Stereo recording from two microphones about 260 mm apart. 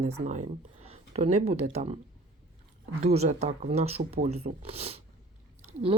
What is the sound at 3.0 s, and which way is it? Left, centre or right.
Speech, right.